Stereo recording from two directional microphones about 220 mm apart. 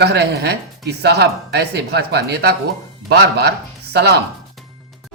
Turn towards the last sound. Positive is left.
turn(degrees=-50)  # may be behind; listen again after turning